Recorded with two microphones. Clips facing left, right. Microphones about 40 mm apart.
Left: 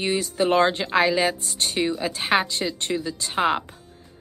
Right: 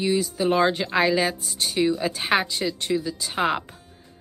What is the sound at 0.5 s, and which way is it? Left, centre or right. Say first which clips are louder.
Speech: left 1 dB; centre.